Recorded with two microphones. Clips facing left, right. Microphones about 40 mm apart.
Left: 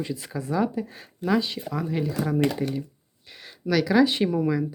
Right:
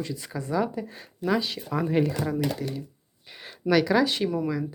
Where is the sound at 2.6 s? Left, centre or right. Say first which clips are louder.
Left 4 dB; left.